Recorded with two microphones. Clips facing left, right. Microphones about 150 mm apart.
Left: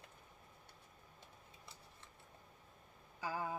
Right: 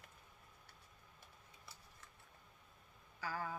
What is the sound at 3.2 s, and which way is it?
Speech, 15° left (ahead or behind).